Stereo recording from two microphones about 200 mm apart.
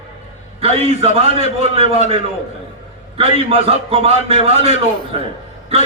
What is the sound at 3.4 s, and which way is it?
A man's voice, 30° right (ahead or behind).